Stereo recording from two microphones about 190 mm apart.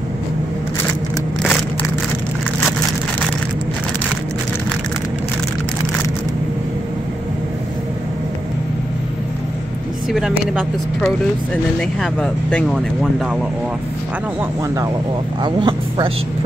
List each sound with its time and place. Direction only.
12.0 s speech: 5° left (ahead or behind)
15.4 s speech: 25° right (ahead or behind)